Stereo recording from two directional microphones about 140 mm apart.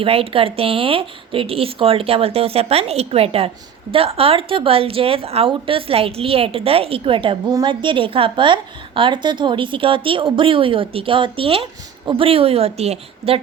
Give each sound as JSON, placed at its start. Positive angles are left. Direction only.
{"t": 0.0, "sound": "a woman's voice", "side_deg": -40}